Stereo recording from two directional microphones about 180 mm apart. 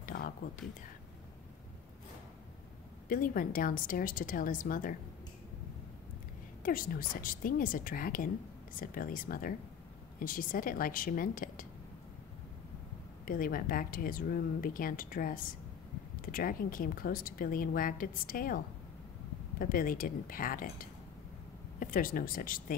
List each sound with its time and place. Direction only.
0.0 s a sound: 55° left (ahead or behind)
3.1 s speech: 50° left (ahead or behind)
6.6 s speech: 50° left (ahead or behind)
13.2 s speech: 50° left (ahead or behind)
19.6 s speech: 50° left (ahead or behind)
21.7 s speech: 50° left (ahead or behind)